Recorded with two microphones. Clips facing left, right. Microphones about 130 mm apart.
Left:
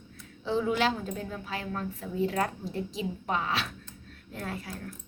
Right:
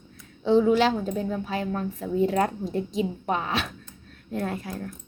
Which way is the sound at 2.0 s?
35° right (ahead or behind).